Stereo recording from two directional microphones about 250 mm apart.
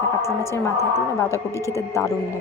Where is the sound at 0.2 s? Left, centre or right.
Centre.